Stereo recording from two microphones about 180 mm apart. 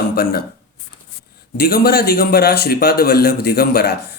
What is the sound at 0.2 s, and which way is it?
Speech, 60° left (ahead or behind).